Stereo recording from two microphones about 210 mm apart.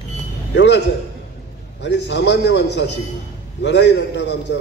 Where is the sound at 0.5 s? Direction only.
55° left (ahead or behind).